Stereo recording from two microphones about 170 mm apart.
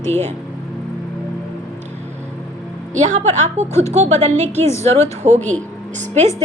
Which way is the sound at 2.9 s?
45° right (ahead or behind).